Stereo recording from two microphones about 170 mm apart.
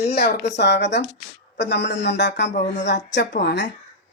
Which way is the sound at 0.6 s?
90° left.